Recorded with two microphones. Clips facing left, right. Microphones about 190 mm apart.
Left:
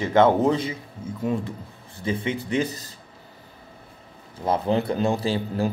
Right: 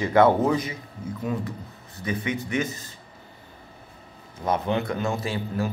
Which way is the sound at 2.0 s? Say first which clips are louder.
Left 2 dB; 25° left (ahead or behind).